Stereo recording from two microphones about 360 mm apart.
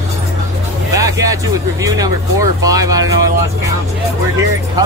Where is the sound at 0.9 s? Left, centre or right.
Centre.